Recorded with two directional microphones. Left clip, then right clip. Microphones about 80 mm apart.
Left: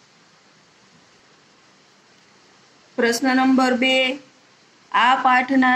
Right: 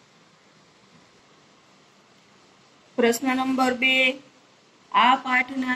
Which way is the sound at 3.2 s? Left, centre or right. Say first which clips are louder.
Left 6 dB; left.